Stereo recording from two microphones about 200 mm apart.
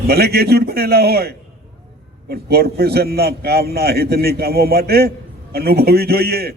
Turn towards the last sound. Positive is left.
turn(degrees=-50)  # may be behind; listen again after turning